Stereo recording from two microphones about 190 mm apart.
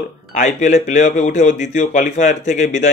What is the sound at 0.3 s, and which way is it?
Speech, 40° left (ahead or behind).